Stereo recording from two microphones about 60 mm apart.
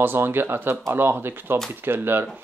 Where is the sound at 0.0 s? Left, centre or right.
Right.